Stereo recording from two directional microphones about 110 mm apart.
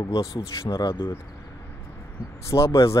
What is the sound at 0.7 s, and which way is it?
Speech, 35° left (ahead or behind).